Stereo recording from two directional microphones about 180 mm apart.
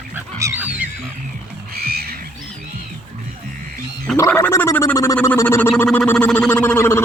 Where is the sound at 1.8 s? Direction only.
55° right (ahead or behind).